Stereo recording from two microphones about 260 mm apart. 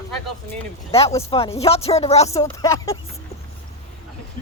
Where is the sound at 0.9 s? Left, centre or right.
Left.